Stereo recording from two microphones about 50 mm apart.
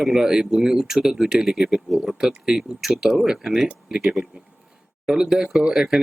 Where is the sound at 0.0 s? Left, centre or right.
Centre.